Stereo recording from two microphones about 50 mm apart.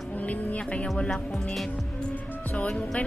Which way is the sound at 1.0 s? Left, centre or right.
Centre.